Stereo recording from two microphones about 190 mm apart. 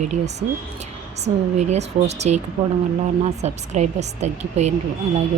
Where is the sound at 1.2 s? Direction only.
35° right (ahead or behind).